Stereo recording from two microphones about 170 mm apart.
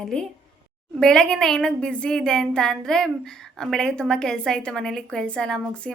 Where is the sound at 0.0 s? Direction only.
5° left (ahead or behind).